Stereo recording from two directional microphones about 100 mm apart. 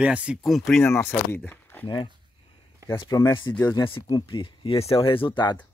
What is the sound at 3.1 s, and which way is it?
Speech, 30° left (ahead or behind).